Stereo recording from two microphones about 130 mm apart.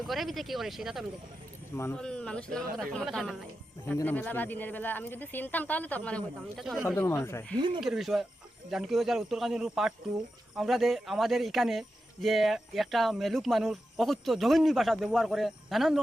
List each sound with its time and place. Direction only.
0.1 s speech: centre (ahead or behind)
1.7 s speech: 20° left (ahead or behind)
2.0 s speech: 5° left (ahead or behind)
7.5 s speech: 35° right (ahead or behind)
7.8 s speech: centre (ahead or behind)